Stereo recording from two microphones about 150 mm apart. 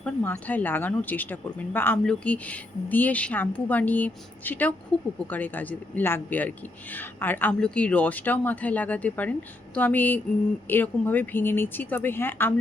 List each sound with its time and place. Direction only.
0.0 s speech: 10° left (ahead or behind)